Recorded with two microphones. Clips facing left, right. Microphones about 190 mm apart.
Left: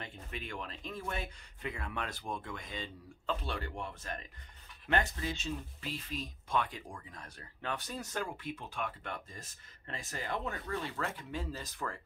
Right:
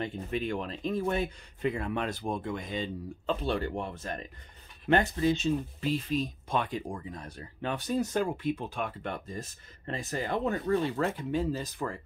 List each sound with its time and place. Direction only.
0.0 s speech: 25° right (ahead or behind)